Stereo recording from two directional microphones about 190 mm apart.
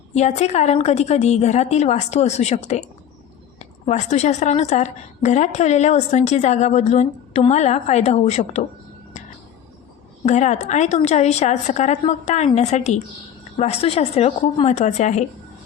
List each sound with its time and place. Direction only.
0.1 s a woman's voice: 35° left (ahead or behind)
10.2 s a woman's voice: 40° left (ahead or behind)